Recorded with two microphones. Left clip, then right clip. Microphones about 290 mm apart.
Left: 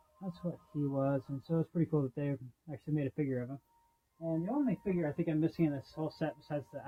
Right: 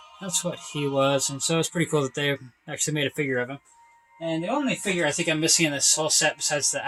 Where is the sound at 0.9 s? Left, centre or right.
Centre.